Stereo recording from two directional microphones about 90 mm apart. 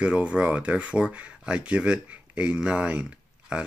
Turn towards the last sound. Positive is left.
turn(degrees=-10)  # may be behind; listen again after turning